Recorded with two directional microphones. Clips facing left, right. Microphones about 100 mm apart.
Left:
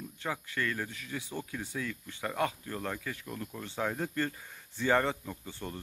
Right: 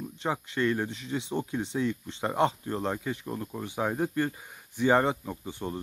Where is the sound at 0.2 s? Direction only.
20° right (ahead or behind).